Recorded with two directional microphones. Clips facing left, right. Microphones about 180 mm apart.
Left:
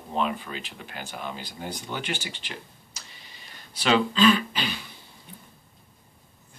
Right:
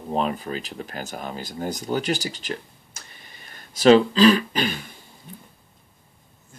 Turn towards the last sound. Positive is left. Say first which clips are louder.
# right 6 dB
turn(degrees=-50)  # may be behind; listen again after turning